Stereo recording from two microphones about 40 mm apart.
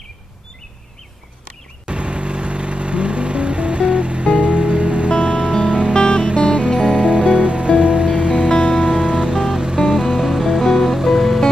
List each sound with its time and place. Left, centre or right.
1.9 s vehicle: right
5.7 s music: right
5.9 s music: left
6.7 s music: centre
7.0 s music: right
8.5 s music: left
8.7 s music: centre
10.6 s music: centre